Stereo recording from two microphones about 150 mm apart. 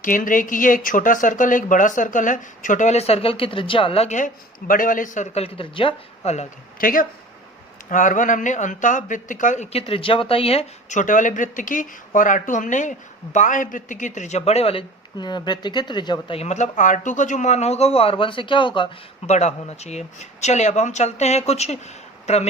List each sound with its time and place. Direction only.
0.0 s speech: 65° left (ahead or behind); by 4.3 s 50° left (ahead or behind)
4.7 s a man's voice: 65° left (ahead or behind); by 6.5 s 45° left (ahead or behind)
6.7 s speech: 70° left (ahead or behind)
9.7 s a man's voice: 40° left (ahead or behind)
19.3 s a man's voice: 50° left (ahead or behind)